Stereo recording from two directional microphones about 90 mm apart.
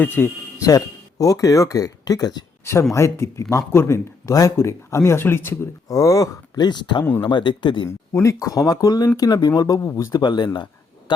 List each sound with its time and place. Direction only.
0.0 s speech: 25° left (ahead or behind)
0.6 s speech: 40° left (ahead or behind)
2.9 s speech: 30° left (ahead or behind)
5.9 s speech: 40° left (ahead or behind)
6.7 s speech: 55° left (ahead or behind)
7.9 s speech: 35° left (ahead or behind)
9.8 s speech: 30° left (ahead or behind)
10.1 s speech: 55° left (ahead or behind)